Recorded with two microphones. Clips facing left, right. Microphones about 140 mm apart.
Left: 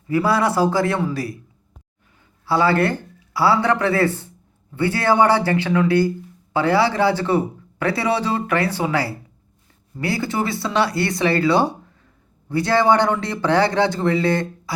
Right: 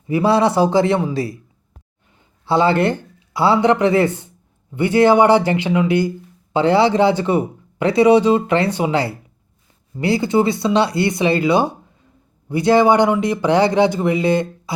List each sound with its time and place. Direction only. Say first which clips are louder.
0.1 s speech: right 3 dB; 25° right (ahead or behind)
2.5 s speech: right 2 dB; 20° right (ahead or behind)